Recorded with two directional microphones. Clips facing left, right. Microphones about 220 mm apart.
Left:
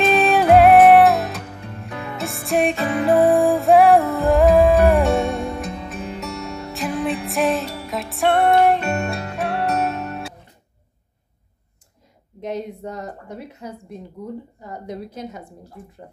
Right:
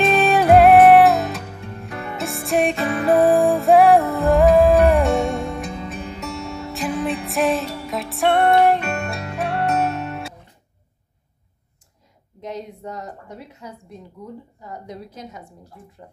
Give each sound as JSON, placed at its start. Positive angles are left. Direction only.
{"t": 0.0, "sound": "music", "side_deg": 0}
{"t": 12.4, "sound": "a sound", "side_deg": 55}
{"t": 14.9, "sound": "a woman's voice", "side_deg": 55}